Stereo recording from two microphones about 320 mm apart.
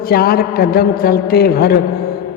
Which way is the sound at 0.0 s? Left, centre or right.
Left.